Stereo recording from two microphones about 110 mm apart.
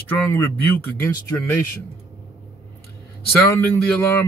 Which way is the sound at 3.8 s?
20° left (ahead or behind).